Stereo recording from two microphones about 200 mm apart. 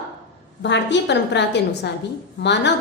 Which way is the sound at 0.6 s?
60° left (ahead or behind).